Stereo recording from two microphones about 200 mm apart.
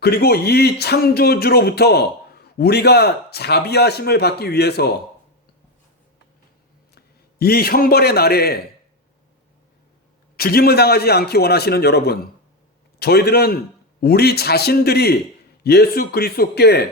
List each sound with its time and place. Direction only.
0.0 s speech: 55° left (ahead or behind)
6.9 s a man's voice: 50° left (ahead or behind)
10.3 s speech: 50° left (ahead or behind)